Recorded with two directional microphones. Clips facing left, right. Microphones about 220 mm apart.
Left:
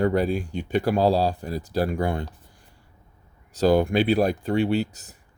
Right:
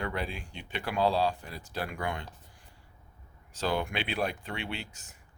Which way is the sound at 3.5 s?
40° left (ahead or behind).